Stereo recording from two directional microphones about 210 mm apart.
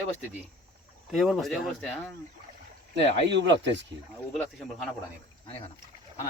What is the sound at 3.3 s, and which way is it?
Speech, 55° right (ahead or behind).